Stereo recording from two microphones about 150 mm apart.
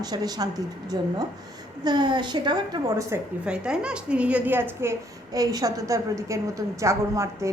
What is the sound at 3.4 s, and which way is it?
A woman's voice, 5° right (ahead or behind).